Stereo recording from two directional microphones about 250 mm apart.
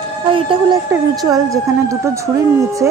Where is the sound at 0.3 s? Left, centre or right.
Centre.